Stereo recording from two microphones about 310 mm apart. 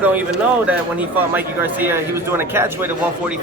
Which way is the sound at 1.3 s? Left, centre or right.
Centre.